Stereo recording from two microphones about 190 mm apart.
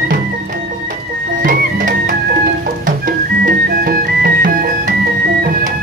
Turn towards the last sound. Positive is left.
turn(degrees=-55)  # may be behind; listen again after turning